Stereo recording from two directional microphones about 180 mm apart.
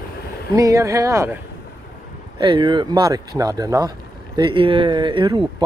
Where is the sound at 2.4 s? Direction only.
30° right (ahead or behind).